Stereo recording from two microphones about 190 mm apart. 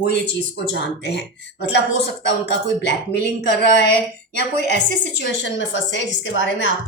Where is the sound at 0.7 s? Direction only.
65° left (ahead or behind).